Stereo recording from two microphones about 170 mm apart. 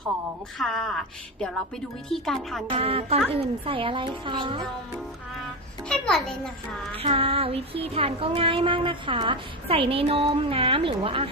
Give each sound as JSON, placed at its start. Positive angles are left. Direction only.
{"t": 0.6, "sound": "a woman's voice", "side_deg": 0}
{"t": 2.6, "sound": "child singing", "side_deg": -35}
{"t": 5.9, "sound": "a child's voice", "side_deg": 5}
{"t": 6.9, "sound": "child singing", "side_deg": -35}